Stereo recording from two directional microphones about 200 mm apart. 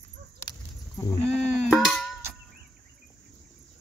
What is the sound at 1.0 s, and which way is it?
Goat, 15° left (ahead or behind).